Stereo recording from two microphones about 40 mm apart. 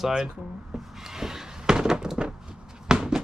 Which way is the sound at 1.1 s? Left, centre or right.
Centre.